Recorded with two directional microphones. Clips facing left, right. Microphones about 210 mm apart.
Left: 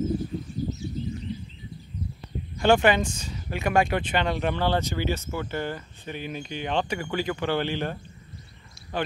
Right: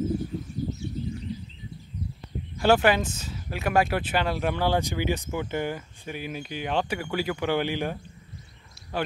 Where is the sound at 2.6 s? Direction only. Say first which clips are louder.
Left 1 dB; 5° right (ahead or behind).